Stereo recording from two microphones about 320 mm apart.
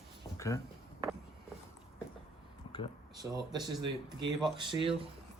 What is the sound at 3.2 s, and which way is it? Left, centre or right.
Speech, centre.